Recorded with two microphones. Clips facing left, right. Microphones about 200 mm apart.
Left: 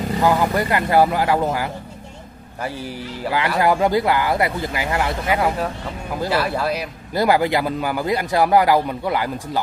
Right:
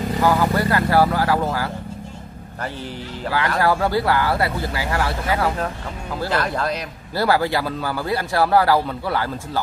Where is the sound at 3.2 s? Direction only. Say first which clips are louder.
Left 1 dB; 15° left (ahead or behind).